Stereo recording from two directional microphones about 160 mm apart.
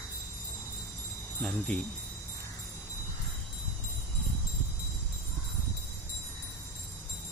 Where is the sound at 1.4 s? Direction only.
10° left (ahead or behind).